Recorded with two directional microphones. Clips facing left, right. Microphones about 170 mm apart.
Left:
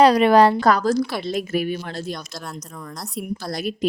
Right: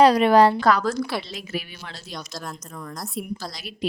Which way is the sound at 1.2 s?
50° left (ahead or behind).